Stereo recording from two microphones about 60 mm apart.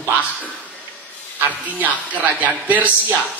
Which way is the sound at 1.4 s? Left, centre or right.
Right.